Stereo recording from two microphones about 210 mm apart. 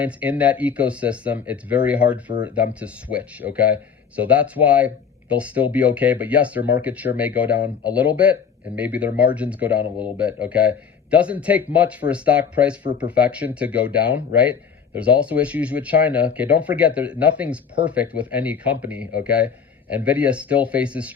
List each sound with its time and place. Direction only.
0.0 s speech: 5° right (ahead or behind)
12.8 s speech: 20° right (ahead or behind)
13.1 s speech: 5° right (ahead or behind)